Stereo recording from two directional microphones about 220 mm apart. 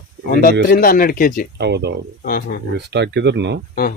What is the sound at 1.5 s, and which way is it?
Speech, 50° right (ahead or behind).